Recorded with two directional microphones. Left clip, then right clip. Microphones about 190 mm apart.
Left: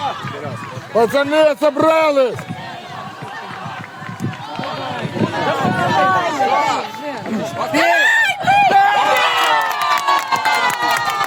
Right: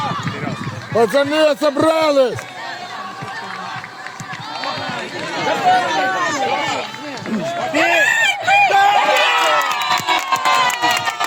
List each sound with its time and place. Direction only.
0.9 s a man's voice: 40° right (ahead or behind)
5.9 s run: 45° left (ahead or behind)